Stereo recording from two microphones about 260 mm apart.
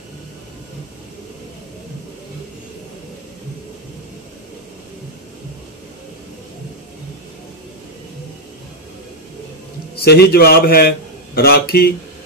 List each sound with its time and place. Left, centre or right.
10.0 s a man's voice: left